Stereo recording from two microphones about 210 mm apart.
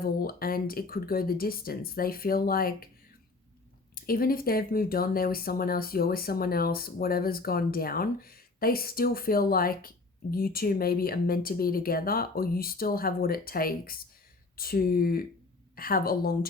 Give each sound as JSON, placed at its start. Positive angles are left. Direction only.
{"t": 0.0, "sound": "speech", "side_deg": 45}
{"t": 3.9, "sound": "speech", "side_deg": 45}